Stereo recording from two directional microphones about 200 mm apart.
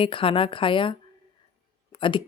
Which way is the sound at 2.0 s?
25° left (ahead or behind).